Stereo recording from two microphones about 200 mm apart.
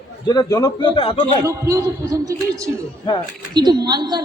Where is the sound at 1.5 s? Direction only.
15° right (ahead or behind).